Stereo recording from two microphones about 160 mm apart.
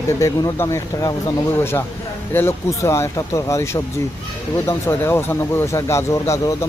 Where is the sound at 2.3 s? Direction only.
15° left (ahead or behind).